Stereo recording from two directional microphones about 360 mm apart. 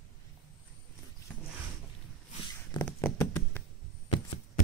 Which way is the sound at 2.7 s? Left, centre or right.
Centre.